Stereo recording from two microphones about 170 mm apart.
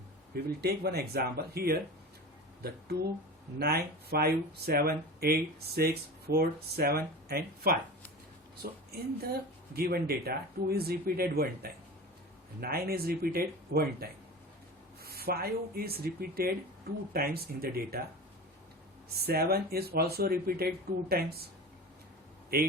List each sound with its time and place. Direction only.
0.6 s speech: 65° right (ahead or behind)
8.9 s speech: 65° right (ahead or behind)
19.1 s speech: 65° right (ahead or behind)